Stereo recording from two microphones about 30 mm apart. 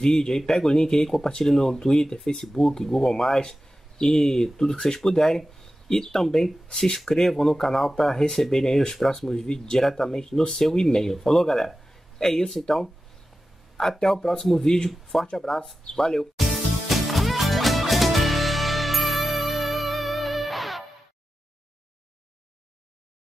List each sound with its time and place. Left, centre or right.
0.0 s speech: centre
14.0 s speech: centre
16.5 s music: centre